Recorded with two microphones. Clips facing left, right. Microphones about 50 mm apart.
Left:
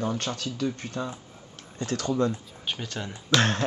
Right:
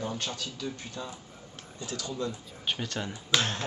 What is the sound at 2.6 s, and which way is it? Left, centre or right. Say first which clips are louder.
Speech: even; centre.